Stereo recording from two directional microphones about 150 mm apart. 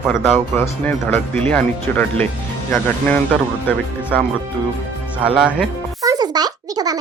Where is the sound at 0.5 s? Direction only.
15° left (ahead or behind).